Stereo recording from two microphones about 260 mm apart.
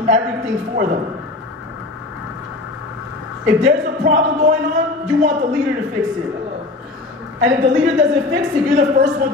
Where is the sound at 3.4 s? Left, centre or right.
Right.